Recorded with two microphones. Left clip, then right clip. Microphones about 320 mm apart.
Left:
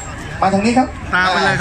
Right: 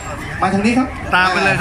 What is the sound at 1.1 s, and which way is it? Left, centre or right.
Speech, centre.